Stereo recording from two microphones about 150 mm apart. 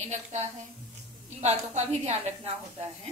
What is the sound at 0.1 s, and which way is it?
A woman's voice, 50° right (ahead or behind).